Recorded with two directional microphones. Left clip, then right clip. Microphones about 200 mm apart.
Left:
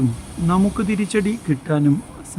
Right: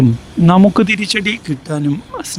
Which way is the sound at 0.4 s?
50° right (ahead or behind).